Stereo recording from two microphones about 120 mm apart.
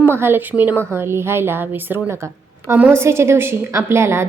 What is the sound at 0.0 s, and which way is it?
A woman's voice, 20° right (ahead or behind).